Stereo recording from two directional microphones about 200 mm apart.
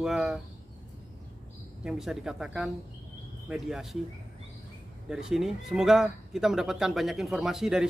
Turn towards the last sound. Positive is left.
turn(degrees=0)  # may be behind; listen again after turning